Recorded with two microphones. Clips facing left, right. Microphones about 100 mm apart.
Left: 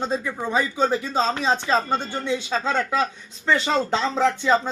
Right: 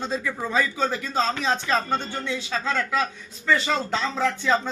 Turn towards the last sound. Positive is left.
turn(degrees=20)  # may be behind; listen again after turning